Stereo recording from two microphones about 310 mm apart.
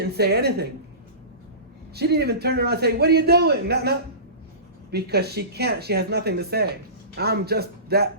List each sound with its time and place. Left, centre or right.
0.0 s a man's voice: right
2.0 s a man's voice: right